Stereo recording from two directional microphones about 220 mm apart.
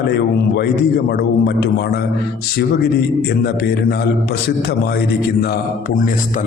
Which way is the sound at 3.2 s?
45° left (ahead or behind).